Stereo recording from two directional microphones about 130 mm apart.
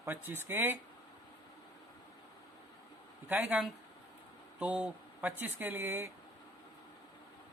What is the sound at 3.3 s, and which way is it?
Speech, 10° right (ahead or behind).